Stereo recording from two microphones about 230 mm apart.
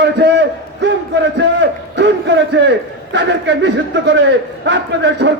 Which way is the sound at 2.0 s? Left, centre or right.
Right.